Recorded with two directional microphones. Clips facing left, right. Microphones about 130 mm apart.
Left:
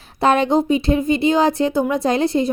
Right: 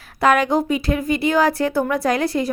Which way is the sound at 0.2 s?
25° left (ahead or behind).